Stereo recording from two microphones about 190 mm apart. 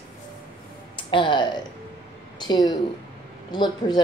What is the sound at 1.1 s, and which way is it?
Speech, 25° left (ahead or behind).